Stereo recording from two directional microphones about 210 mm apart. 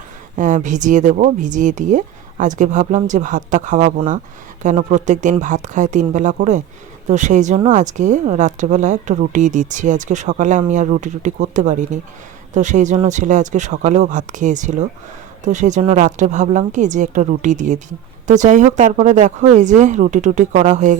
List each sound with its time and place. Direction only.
0.3 s a woman's voice: 35° right (ahead or behind)